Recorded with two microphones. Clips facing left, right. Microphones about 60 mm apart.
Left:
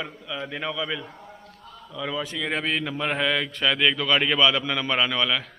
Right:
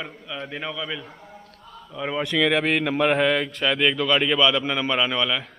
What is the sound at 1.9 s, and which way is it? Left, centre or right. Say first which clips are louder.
Speech: right 2 dB; right.